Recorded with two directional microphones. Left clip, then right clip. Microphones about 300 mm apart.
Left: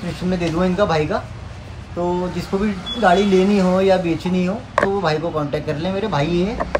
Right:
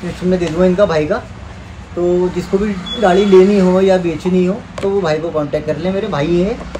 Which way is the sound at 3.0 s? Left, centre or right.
Centre.